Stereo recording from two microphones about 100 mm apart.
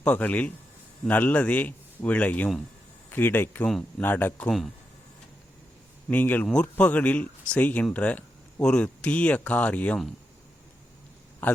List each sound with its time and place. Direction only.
0.0 s speech: 15° left (ahead or behind)
3.7 s speech: 5° left (ahead or behind)
4.0 s speech: 20° left (ahead or behind)
4.4 s speech: centre (ahead or behind)
6.1 s speech: 20° left (ahead or behind)
11.4 s a man's voice: 20° left (ahead or behind)